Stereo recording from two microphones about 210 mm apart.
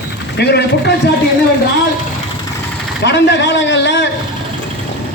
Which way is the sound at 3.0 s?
55° left (ahead or behind).